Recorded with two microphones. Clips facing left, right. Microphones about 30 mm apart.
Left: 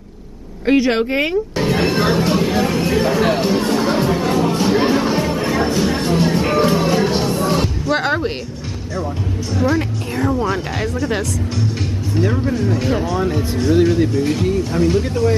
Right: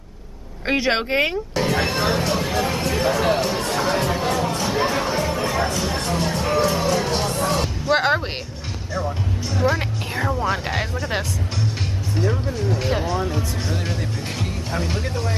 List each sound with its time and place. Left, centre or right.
0.7 s speech: centre
1.6 s speech: centre
4.3 s music: centre
6.4 s music: left; by 7.7 s centre
7.8 s a sound: centre
8.9 s speech: centre
14.1 s speech: centre